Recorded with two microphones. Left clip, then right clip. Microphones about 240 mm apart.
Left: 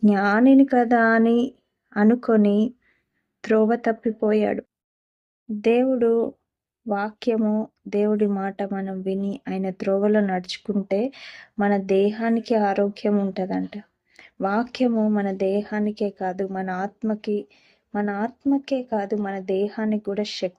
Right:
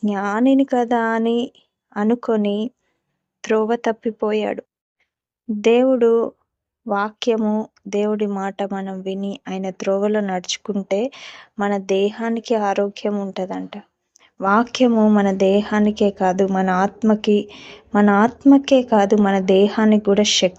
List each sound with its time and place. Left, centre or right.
0.0 s speech: centre
5.6 s speech: centre